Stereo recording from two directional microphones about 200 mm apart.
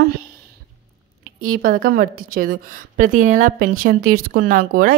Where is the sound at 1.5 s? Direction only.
45° right (ahead or behind).